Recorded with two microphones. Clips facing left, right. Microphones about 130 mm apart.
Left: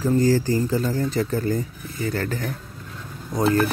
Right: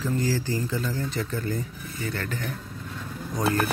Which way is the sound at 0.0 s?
45° left (ahead or behind).